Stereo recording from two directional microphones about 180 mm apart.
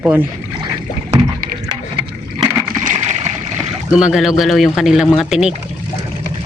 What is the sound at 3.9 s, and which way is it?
Speech, 5° right (ahead or behind).